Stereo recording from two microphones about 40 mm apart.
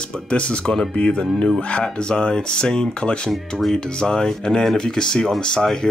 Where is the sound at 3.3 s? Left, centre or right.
Centre.